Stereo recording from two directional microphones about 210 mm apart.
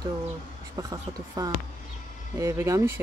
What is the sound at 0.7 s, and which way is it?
Speech, 15° right (ahead or behind).